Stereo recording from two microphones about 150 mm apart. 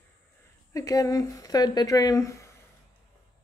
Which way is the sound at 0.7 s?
25° left (ahead or behind).